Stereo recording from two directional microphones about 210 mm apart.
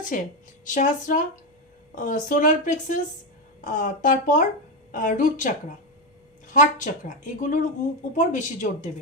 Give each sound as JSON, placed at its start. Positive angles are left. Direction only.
{"t": 0.1, "sound": "speech", "side_deg": 40}